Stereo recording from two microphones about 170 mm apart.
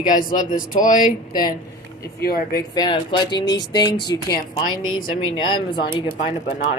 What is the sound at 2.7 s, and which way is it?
Speech, 25° left (ahead or behind).